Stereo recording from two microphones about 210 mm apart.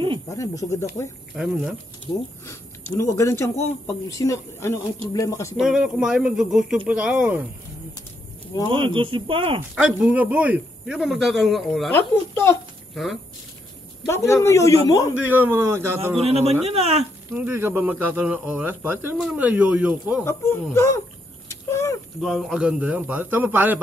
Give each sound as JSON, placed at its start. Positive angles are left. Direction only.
{"t": 0.3, "sound": "a man's voice", "side_deg": 15}
{"t": 1.3, "sound": "speech", "side_deg": 0}
{"t": 2.9, "sound": "a man's voice", "side_deg": 15}
{"t": 5.6, "sound": "speech", "side_deg": -5}
{"t": 8.8, "sound": "speech", "side_deg": -25}
{"t": 9.8, "sound": "speech", "side_deg": -5}
{"t": 12.4, "sound": "babbling", "side_deg": 10}
{"t": 14.0, "sound": "a man's voice", "side_deg": 15}
{"t": 15.1, "sound": "speech", "side_deg": -10}
{"t": 16.2, "sound": "speech", "side_deg": -30}
{"t": 17.3, "sound": "speech", "side_deg": -10}
{"t": 20.7, "sound": "a man's voice", "side_deg": 15}
{"t": 21.5, "sound": "a sound", "side_deg": 15}
{"t": 22.2, "sound": "speech", "side_deg": 0}